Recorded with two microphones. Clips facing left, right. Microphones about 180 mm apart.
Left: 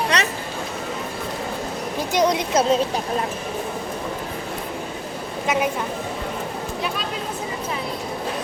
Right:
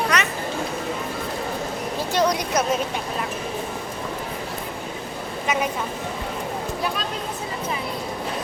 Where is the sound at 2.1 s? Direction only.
20° left (ahead or behind).